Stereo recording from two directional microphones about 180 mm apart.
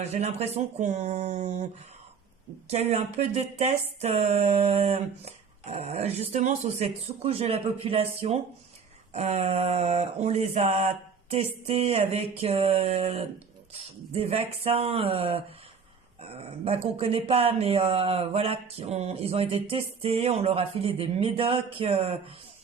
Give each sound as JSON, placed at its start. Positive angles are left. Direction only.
{"t": 0.1, "sound": "speech", "side_deg": -35}
{"t": 2.6, "sound": "speech", "side_deg": -35}